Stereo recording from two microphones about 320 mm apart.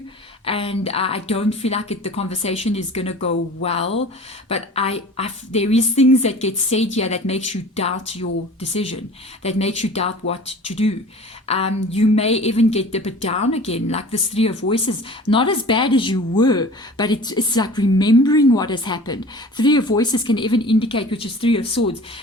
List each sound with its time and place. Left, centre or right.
0.4 s a woman's voice: centre
9.4 s a woman's voice: centre